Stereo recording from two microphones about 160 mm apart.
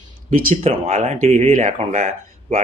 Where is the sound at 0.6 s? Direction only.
40° right (ahead or behind).